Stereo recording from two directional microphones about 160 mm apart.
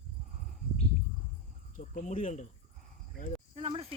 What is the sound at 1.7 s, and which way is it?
Speech, 50° left (ahead or behind).